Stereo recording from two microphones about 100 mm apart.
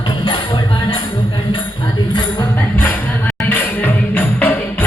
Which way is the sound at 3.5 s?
20° left (ahead or behind).